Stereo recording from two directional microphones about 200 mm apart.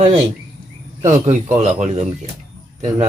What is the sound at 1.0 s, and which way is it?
A man's voice, 35° right (ahead or behind).